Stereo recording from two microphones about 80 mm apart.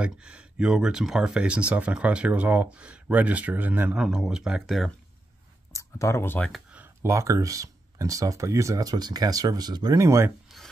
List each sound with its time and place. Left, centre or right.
0.0 s speech: centre
3.9 s speech: centre
4.6 s speech: centre
5.7 s a sound: left
7.0 s speech: right
10.0 s speech: right